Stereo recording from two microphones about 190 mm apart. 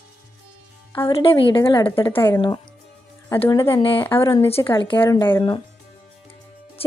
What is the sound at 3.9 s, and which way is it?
Speech, 10° left (ahead or behind).